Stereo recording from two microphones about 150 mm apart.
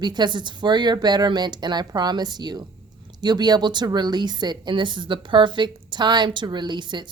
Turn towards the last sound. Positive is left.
turn(degrees=-30)  # may be behind; listen again after turning